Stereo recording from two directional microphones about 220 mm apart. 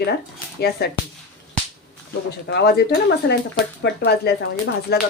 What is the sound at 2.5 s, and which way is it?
Speech, 50° left (ahead or behind).